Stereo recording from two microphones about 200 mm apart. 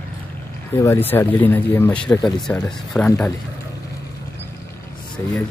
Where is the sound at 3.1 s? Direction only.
15° left (ahead or behind).